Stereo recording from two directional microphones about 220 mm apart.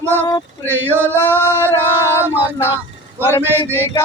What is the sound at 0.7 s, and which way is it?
Male singing, 10° right (ahead or behind).